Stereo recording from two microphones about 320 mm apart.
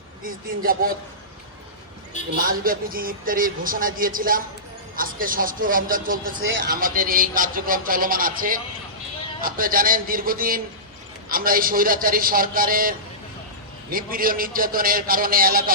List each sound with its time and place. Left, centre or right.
0.2 s a man's voice: right
2.3 s a man's voice: right